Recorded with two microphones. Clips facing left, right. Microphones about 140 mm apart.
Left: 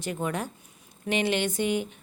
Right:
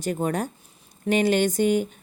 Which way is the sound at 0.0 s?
40° right (ahead or behind).